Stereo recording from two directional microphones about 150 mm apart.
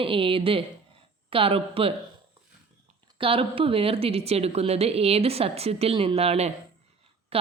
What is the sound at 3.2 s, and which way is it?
Speech, 35° right (ahead or behind).